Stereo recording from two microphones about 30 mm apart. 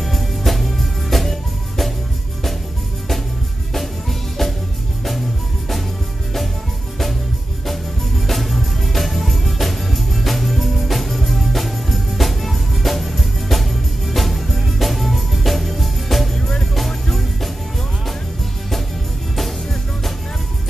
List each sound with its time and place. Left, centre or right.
0.0 s music: centre
3.7 s music: centre
8.3 s music: centre
19.3 s music: centre